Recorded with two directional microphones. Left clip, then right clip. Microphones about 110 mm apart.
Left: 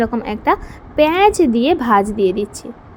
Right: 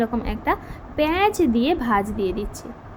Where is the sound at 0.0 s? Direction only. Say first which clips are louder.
Left 6 dB; 50° left (ahead or behind).